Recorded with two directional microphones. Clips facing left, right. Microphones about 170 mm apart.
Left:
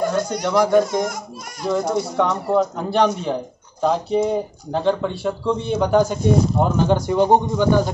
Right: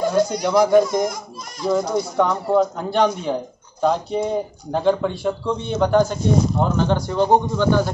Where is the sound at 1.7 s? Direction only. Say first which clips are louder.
Even; centre (ahead or behind).